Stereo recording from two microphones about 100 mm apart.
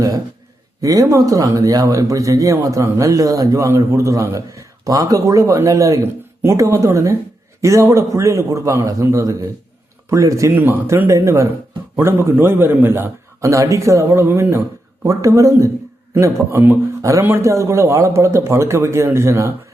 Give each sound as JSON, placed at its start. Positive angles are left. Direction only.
{"t": 0.8, "sound": "speech", "side_deg": -35}
{"t": 10.5, "sound": "a man's voice", "side_deg": -20}